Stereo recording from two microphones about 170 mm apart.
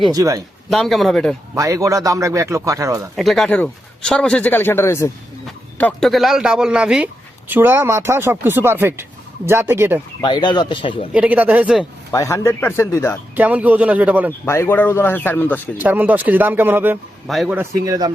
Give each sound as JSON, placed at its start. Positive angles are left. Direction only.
{"t": 0.1, "sound": "a man's voice", "side_deg": -20}
{"t": 0.7, "sound": "a man's voice", "side_deg": 0}
{"t": 1.5, "sound": "a man's voice", "side_deg": -20}
{"t": 3.2, "sound": "a man's voice", "side_deg": 0}
{"t": 5.7, "sound": "a man's voice", "side_deg": 5}
{"t": 10.2, "sound": "speech", "side_deg": 25}
{"t": 11.1, "sound": "speech", "side_deg": -10}
{"t": 12.1, "sound": "a man's voice", "side_deg": 15}
{"t": 13.3, "sound": "speech", "side_deg": -10}
{"t": 14.4, "sound": "a man's voice", "side_deg": 15}
{"t": 15.8, "sound": "speech", "side_deg": -10}
{"t": 17.2, "sound": "a man's voice", "side_deg": 0}
{"t": 17.6, "sound": "a man's voice", "side_deg": -20}